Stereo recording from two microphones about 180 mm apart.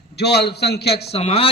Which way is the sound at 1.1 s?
35° left (ahead or behind).